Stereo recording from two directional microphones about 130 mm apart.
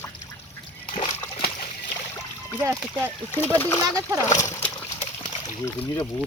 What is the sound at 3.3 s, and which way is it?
Speech, 15° left (ahead or behind).